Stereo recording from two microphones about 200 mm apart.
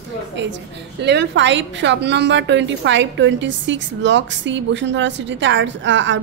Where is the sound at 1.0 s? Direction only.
60° right (ahead or behind).